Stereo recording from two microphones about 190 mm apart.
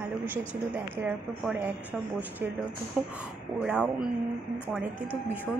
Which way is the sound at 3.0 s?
5° right (ahead or behind).